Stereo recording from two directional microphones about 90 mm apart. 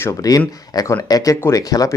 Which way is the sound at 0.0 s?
40° left (ahead or behind).